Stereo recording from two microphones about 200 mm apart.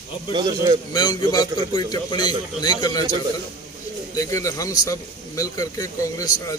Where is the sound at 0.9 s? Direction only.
20° left (ahead or behind).